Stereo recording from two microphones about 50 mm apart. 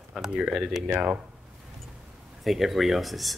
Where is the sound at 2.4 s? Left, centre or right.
Centre.